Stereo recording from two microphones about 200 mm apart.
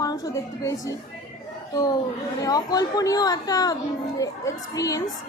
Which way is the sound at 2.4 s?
20° left (ahead or behind).